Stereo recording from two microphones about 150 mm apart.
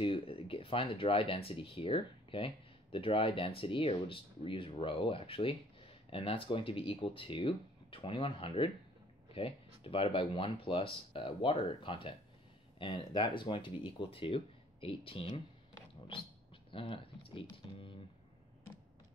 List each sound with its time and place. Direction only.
0.0 s speech: 35° left (ahead or behind)
16.7 s speech: 35° left (ahead or behind)